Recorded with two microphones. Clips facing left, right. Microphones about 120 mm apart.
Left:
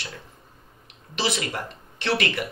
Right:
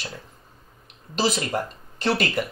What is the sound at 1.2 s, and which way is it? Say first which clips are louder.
Speech: right 4 dB; 40° right (ahead or behind).